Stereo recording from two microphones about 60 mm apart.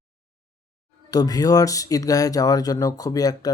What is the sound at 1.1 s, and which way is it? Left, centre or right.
Speech, left.